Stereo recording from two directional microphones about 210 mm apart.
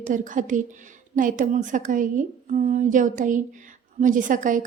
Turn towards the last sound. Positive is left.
turn(degrees=-40)  # may be behind; listen again after turning